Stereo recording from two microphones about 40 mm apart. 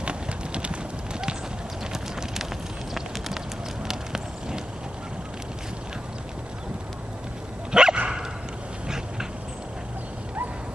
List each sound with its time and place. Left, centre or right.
0.0 s clip-clop: right
3.8 s run: centre
7.7 s dog: centre